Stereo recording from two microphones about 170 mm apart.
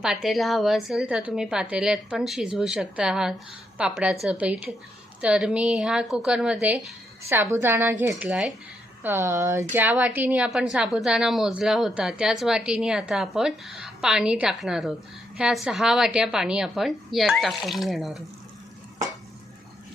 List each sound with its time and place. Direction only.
0.0 s a woman's voice: 5° right (ahead or behind)